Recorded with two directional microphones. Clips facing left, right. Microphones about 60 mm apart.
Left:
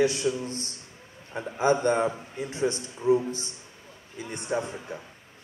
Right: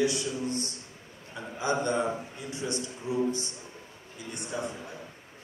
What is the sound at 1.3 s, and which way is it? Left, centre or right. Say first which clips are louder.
A man's voice: left 6 dB; left.